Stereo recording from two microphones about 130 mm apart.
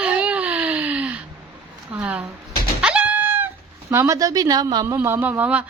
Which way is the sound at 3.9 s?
25° right (ahead or behind).